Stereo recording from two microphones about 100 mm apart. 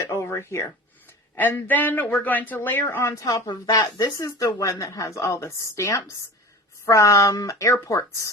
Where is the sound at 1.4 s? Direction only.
20° left (ahead or behind).